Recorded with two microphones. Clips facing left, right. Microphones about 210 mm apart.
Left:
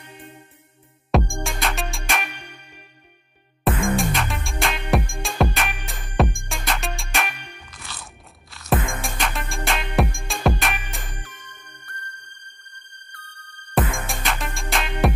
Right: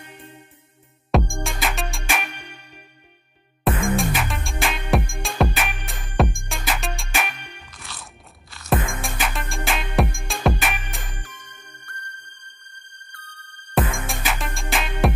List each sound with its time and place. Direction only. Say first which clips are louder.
1.1 s music: even; centre (ahead or behind)
3.6 s music: even; centre (ahead or behind)
7.8 s crunch: left 1 dB; centre (ahead or behind)
9.0 s music: even; centre (ahead or behind)
13.7 s music: even; centre (ahead or behind)